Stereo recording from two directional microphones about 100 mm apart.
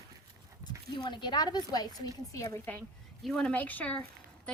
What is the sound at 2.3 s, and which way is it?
Speech, 30° left (ahead or behind).